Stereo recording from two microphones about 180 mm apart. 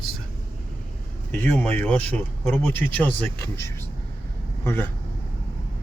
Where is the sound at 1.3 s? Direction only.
10° left (ahead or behind).